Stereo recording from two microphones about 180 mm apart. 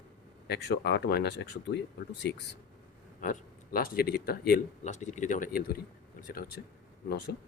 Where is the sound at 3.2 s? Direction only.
50° left (ahead or behind).